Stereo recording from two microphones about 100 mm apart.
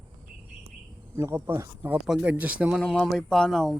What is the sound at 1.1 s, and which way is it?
Speech, 25° right (ahead or behind).